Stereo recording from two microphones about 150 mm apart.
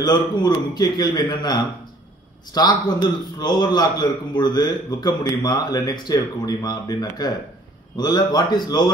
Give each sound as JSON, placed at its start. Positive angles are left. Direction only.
{"t": 0.0, "sound": "a man's voice", "side_deg": 30}